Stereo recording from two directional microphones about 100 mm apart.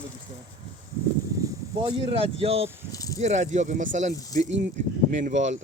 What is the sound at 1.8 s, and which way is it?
Speech, 60° right (ahead or behind).